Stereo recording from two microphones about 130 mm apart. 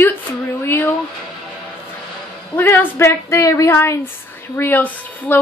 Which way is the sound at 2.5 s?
15° left (ahead or behind).